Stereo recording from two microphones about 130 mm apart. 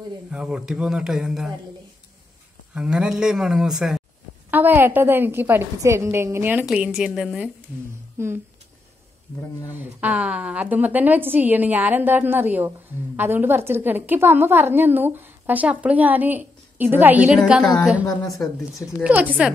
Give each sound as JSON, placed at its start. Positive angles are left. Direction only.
{"t": 0.3, "sound": "speech", "side_deg": -5}
{"t": 2.7, "sound": "speech", "side_deg": -5}
{"t": 4.5, "sound": "a woman's voice", "side_deg": -15}
{"t": 6.6, "sound": "speech", "side_deg": -5}
{"t": 8.2, "sound": "speech", "side_deg": -20}
{"t": 9.8, "sound": "a woman's voice", "side_deg": -10}
{"t": 17.4, "sound": "speech", "side_deg": 0}
{"t": 19.0, "sound": "a woman's voice", "side_deg": -10}